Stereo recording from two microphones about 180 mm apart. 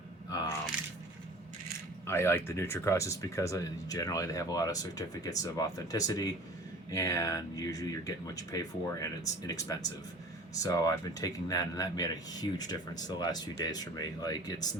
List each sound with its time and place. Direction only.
2.0 s speech: 15° left (ahead or behind)